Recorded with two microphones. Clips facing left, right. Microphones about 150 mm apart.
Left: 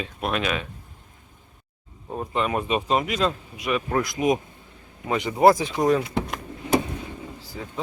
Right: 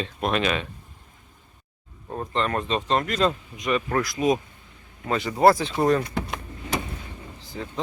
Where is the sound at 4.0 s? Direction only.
20° left (ahead or behind).